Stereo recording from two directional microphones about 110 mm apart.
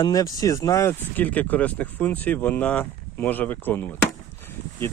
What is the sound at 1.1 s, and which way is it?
Speech, 15° left (ahead or behind).